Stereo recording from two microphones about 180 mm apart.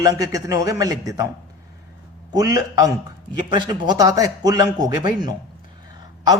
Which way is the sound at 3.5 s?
25° right (ahead or behind).